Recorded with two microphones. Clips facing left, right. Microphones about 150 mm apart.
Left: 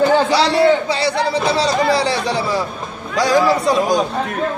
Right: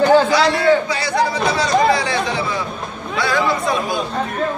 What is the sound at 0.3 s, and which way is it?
Speech, 30° left (ahead or behind).